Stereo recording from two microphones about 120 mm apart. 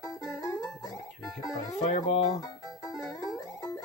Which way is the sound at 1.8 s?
80° left.